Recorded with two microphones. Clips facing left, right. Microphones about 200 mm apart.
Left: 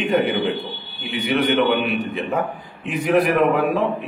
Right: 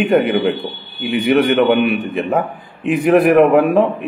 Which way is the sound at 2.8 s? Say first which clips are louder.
Right 6 dB; 55° right (ahead or behind).